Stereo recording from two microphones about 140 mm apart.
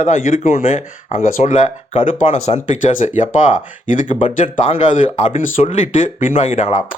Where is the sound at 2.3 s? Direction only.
55° left (ahead or behind).